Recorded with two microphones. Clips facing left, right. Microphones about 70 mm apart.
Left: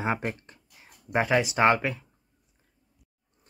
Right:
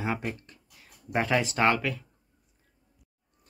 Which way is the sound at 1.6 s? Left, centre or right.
Left.